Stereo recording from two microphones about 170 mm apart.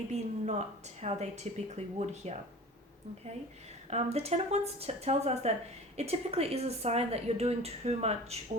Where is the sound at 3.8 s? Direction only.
40° right (ahead or behind).